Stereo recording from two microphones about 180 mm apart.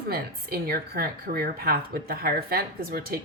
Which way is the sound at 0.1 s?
60° right (ahead or behind).